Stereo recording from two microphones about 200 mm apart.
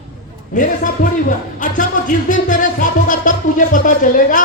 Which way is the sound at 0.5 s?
40° left (ahead or behind).